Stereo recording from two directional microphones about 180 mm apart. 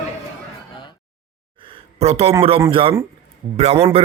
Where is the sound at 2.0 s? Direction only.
35° right (ahead or behind).